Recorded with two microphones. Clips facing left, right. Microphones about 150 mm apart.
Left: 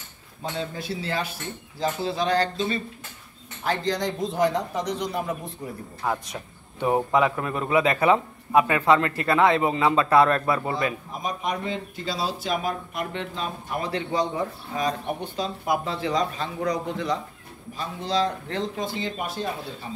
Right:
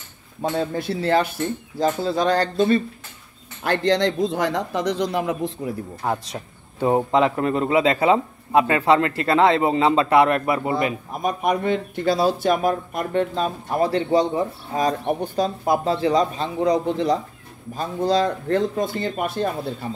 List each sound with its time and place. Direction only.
0.4 s speech: 60° right (ahead or behind)
1.8 s speech: 45° right (ahead or behind)
3.6 s speech: 70° right (ahead or behind); by 5.5 s 90° right
6.0 s speech: 35° right (ahead or behind)
6.9 s speech: 25° right (ahead or behind)
11.2 s speech: 60° right (ahead or behind); by 17.2 s 35° right (ahead or behind)
17.7 s speech: 45° right (ahead or behind)